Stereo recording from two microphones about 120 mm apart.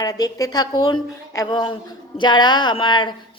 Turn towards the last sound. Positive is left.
turn(degrees=40)  # may be behind; listen again after turning